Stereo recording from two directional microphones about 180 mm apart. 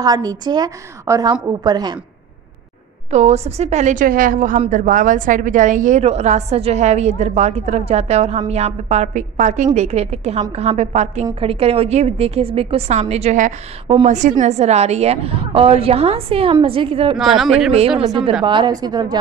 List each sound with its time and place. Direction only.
0.0 s a woman's voice: 20° right (ahead or behind)
3.1 s a woman's voice: 40° right (ahead or behind)
17.2 s speech: centre (ahead or behind)
18.0 s a woman's voice: 30° right (ahead or behind)